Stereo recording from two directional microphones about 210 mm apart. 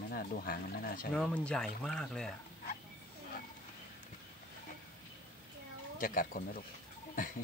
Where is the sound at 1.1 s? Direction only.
5° left (ahead or behind).